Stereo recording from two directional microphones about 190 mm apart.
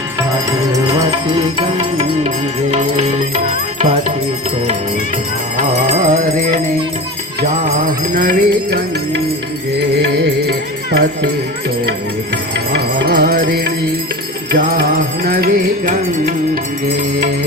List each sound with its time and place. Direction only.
0.7 s music: 20° right (ahead or behind)
5.5 s music: 40° right (ahead or behind)
10.9 s music: 60° right (ahead or behind)
12.3 s music: 60° right (ahead or behind)